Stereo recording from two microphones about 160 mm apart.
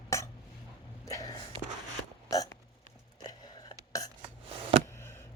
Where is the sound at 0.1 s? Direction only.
20° left (ahead or behind).